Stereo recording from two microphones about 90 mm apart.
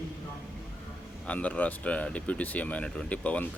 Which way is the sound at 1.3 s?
15° left (ahead or behind).